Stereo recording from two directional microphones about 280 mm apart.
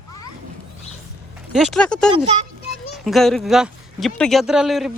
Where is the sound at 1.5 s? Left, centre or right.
Centre.